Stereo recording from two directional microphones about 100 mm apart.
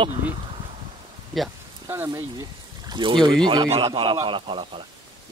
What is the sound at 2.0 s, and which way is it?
Speech, 40° right (ahead or behind).